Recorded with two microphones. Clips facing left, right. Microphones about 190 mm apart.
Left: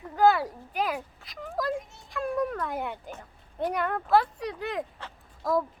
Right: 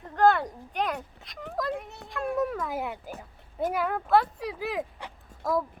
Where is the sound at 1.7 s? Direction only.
65° right (ahead or behind).